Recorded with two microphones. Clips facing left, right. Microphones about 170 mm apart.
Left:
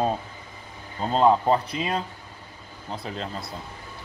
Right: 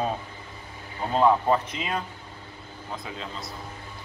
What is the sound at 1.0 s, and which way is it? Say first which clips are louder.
Speech: left 1 dB; 25° left (ahead or behind).